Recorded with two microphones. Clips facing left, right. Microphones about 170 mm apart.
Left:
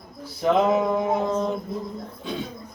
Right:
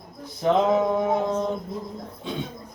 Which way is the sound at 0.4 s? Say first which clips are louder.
Even; 10° left (ahead or behind).